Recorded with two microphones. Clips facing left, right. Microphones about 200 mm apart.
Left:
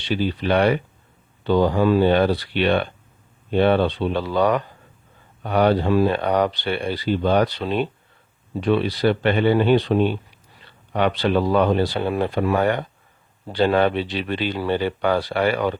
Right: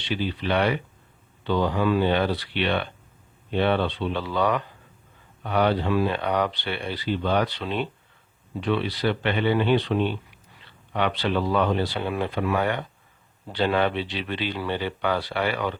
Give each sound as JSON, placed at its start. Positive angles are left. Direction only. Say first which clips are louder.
{"t": 0.0, "sound": "speech", "louder": "left 5 dB", "side_deg": 45}